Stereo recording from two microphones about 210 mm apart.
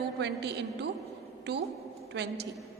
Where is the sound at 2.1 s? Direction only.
55° right (ahead or behind).